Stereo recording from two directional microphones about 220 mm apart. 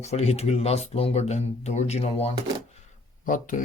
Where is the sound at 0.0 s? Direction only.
30° left (ahead or behind).